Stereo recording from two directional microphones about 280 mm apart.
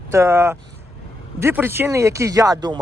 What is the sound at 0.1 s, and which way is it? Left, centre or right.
Speech, centre.